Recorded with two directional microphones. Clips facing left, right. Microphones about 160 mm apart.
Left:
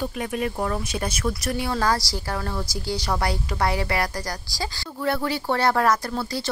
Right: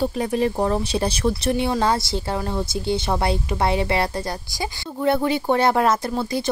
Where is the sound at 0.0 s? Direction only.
35° right (ahead or behind).